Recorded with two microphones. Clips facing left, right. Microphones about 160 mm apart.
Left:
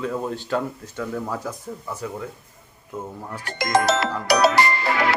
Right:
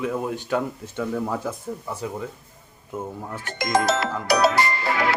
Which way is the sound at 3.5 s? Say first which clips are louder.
Left 2 dB; 75° left (ahead or behind).